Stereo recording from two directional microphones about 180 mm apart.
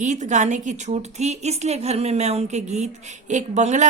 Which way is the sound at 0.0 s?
40° right (ahead or behind).